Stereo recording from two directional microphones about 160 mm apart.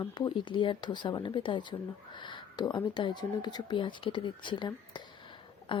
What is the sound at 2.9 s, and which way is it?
Speech, 30° left (ahead or behind).